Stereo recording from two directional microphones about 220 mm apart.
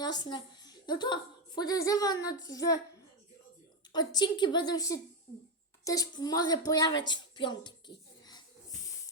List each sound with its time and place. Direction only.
0.0 s a woman's voice: 20° left (ahead or behind)
3.9 s a woman's voice: 20° left (ahead or behind)